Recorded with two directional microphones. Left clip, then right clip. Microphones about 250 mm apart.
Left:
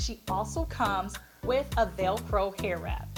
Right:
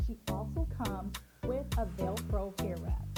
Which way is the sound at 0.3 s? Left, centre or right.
Centre.